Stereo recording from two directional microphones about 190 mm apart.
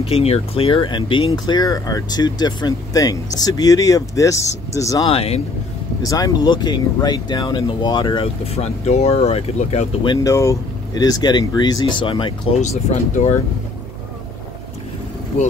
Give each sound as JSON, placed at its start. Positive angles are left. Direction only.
{"t": 0.0, "sound": "speech", "side_deg": 30}
{"t": 5.0, "sound": "speech", "side_deg": 30}
{"t": 6.0, "sound": "speech", "side_deg": 20}
{"t": 10.2, "sound": "speech", "side_deg": 15}
{"t": 12.6, "sound": "speech", "side_deg": 40}